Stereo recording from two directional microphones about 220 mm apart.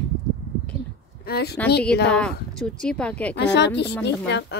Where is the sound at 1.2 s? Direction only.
45° left (ahead or behind).